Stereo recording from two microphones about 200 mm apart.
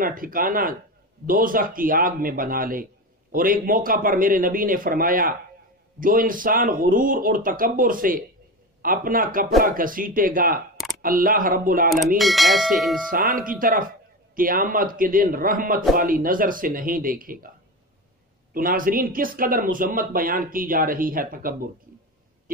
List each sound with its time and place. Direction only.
0.0 s a man's voice: 45° right (ahead or behind)
12.2 s speech: centre (ahead or behind)
13.1 s a man's voice: 45° right (ahead or behind)
18.5 s a man's voice: 45° right (ahead or behind)